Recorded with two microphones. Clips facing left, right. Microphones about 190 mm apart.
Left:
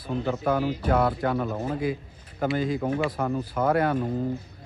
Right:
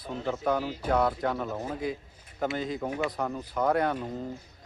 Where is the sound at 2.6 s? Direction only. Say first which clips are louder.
Left 5 dB; 5° left (ahead or behind).